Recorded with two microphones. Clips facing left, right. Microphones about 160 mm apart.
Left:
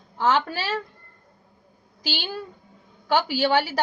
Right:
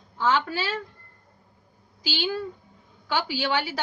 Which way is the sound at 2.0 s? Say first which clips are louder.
Right 3 dB; 50° left (ahead or behind).